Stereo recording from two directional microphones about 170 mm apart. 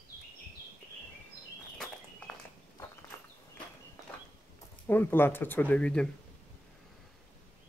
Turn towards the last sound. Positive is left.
turn(degrees=5)  # may be behind; listen again after turning